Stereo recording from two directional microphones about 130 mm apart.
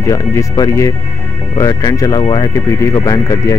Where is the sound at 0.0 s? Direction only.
25° left (ahead or behind).